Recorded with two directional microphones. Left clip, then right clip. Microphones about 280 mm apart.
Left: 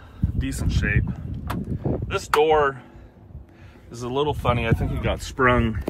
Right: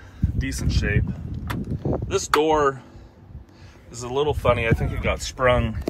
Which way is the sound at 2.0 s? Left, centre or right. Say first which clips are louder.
Left 1 dB; centre.